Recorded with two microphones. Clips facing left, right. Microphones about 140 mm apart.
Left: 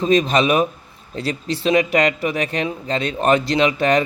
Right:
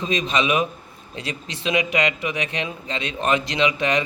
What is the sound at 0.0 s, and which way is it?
A man's voice, 40° left (ahead or behind).